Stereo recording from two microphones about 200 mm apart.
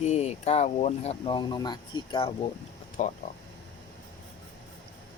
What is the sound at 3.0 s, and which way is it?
Speech, 35° left (ahead or behind).